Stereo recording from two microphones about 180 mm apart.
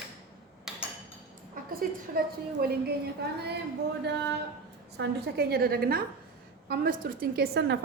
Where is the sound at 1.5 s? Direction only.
50° right (ahead or behind).